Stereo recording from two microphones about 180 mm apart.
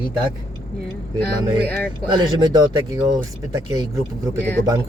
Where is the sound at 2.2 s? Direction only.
25° right (ahead or behind).